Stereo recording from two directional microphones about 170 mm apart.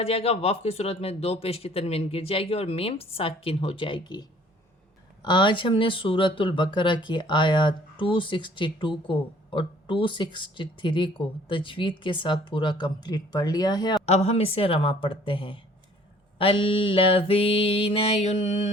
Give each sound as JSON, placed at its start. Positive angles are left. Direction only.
{"t": 0.0, "sound": "speech", "side_deg": 35}
{"t": 14.0, "sound": "speech", "side_deg": 40}